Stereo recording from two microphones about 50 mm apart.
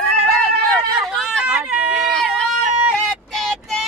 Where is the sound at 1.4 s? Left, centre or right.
Centre.